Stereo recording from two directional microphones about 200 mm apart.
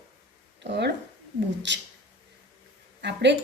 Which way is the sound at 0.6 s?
60° right (ahead or behind).